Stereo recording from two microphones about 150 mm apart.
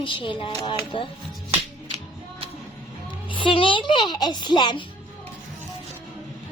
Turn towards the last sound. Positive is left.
turn(degrees=30)  # may be behind; listen again after turning